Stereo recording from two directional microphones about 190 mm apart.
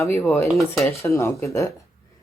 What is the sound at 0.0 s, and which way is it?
Speech, 10° left (ahead or behind).